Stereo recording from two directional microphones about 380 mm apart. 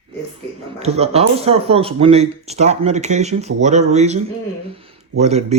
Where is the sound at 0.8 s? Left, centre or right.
Centre.